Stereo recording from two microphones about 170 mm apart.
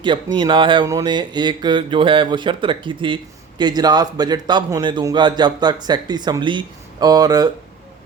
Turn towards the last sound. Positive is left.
turn(degrees=-20)  # may be behind; listen again after turning